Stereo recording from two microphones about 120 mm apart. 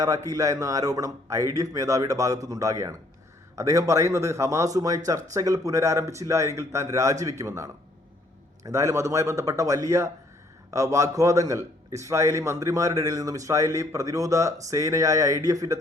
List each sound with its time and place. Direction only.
0.3 s a man's voice: 25° right (ahead or behind)